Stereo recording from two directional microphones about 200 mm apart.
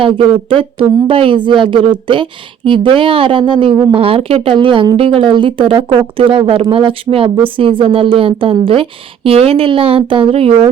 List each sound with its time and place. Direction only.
0.0 s a woman's voice: 25° right (ahead or behind)